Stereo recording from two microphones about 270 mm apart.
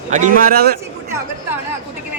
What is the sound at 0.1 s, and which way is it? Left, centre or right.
Speech, right.